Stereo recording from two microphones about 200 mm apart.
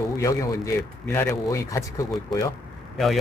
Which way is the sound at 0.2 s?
15° left (ahead or behind).